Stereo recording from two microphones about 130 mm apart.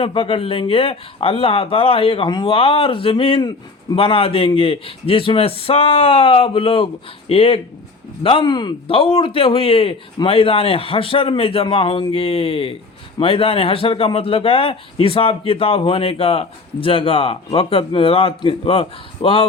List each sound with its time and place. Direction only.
0.0 s a man's voice: 40° left (ahead or behind)